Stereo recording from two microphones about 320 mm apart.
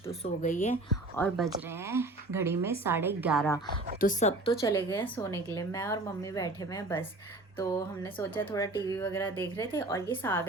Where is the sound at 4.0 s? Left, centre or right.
Left.